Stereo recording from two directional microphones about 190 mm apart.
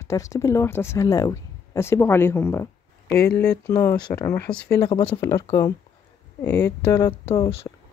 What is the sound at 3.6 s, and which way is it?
Speech, 15° left (ahead or behind).